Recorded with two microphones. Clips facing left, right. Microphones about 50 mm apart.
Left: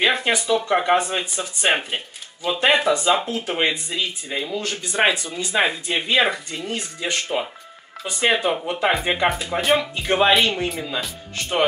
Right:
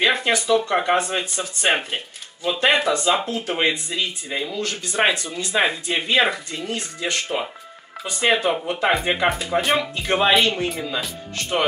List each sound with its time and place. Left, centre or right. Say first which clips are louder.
0.0 s speech: even; centre
4.5 s speech: even; centre